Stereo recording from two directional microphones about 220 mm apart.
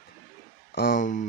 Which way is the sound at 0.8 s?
40° left (ahead or behind).